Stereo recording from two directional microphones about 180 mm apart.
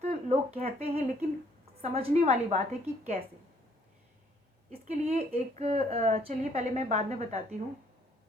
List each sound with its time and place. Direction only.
0.0 s a woman's voice: 35° right (ahead or behind)
4.7 s a woman's voice: 35° right (ahead or behind)